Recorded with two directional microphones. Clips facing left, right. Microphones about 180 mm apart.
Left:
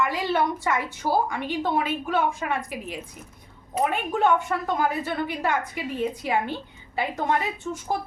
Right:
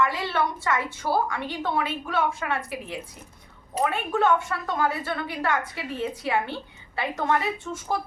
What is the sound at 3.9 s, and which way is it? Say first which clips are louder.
Speech: even; 15° left (ahead or behind).